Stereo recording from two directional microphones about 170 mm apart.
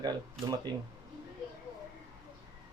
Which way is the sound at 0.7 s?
25° right (ahead or behind).